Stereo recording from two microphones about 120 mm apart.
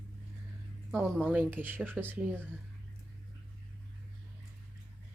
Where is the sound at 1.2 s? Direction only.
15° right (ahead or behind).